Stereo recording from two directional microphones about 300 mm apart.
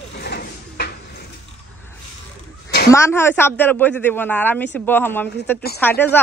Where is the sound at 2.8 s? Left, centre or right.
Centre.